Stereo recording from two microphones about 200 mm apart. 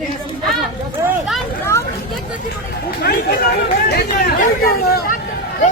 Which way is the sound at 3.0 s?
50° left (ahead or behind).